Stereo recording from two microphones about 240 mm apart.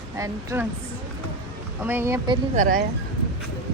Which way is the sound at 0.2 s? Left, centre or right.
Centre.